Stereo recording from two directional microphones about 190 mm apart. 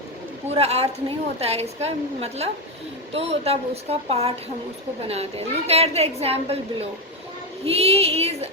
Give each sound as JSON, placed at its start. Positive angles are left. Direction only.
{"t": 0.5, "sound": "a woman's voice", "side_deg": -35}